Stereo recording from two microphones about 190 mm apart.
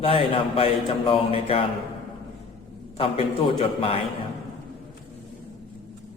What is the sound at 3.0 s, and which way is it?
Speech, 30° left (ahead or behind).